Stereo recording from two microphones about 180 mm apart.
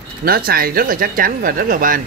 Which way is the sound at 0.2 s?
55° right (ahead or behind).